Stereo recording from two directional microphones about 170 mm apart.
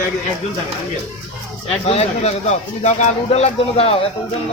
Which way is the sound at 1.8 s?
40° left (ahead or behind).